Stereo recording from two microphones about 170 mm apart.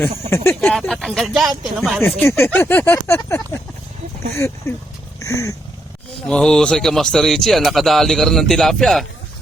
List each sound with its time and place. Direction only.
0.0 s speech: 15° left (ahead or behind)
0.7 s speech: 5° left (ahead or behind)
2.0 s speech: 10° left (ahead or behind)
5.2 s a sound: 20° left (ahead or behind)
6.2 s speech: 5° left (ahead or behind)